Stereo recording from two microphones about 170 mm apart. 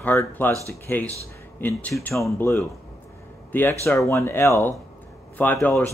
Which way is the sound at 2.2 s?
15° left (ahead or behind).